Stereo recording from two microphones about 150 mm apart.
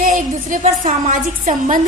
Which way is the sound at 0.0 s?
60° right (ahead or behind).